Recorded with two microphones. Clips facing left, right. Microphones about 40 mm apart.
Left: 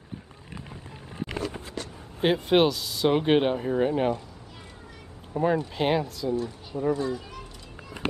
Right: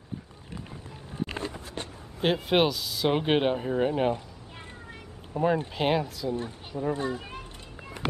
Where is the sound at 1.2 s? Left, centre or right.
Right.